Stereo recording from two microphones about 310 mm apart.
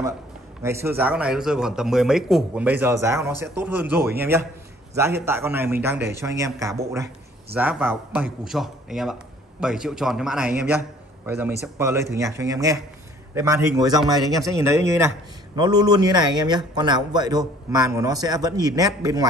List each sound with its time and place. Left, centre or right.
0.6 s a man's voice: centre